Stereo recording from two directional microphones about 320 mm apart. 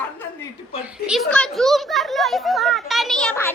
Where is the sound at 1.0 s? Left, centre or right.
Centre.